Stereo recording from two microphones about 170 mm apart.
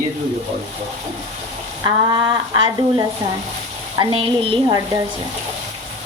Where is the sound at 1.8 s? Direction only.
25° right (ahead or behind).